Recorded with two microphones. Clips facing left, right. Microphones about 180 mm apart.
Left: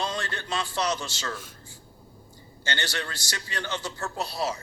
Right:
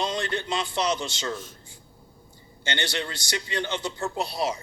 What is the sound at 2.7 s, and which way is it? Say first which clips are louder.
A man's voice: right 2 dB; 25° right (ahead or behind).